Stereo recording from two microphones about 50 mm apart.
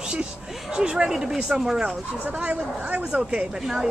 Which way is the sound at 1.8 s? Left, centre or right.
Right.